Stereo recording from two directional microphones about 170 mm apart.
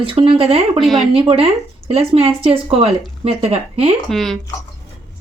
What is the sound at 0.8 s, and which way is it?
Speech, centre (ahead or behind).